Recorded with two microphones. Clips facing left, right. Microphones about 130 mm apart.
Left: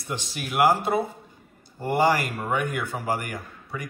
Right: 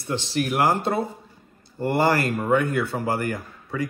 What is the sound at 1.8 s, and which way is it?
A man's voice, 15° left (ahead or behind).